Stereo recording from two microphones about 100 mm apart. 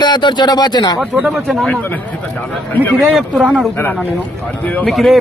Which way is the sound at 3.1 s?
5° right (ahead or behind).